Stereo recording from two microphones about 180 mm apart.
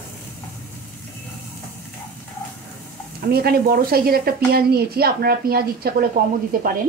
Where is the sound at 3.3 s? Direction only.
60° right (ahead or behind).